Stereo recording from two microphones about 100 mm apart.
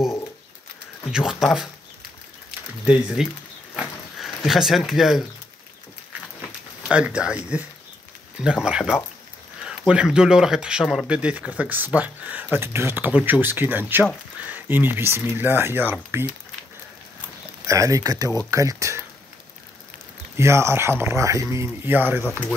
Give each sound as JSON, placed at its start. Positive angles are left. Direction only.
{"t": 1.1, "sound": "speech", "side_deg": -5}
{"t": 2.8, "sound": "speech", "side_deg": -10}
{"t": 3.7, "sound": "a sound", "side_deg": 0}
{"t": 6.9, "sound": "speech", "side_deg": -10}
{"t": 17.6, "sound": "speech", "side_deg": -30}
{"t": 20.3, "sound": "speech", "side_deg": -25}